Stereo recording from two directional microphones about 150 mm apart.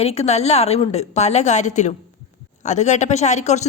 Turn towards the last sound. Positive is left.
turn(degrees=50)  # may be behind; listen again after turning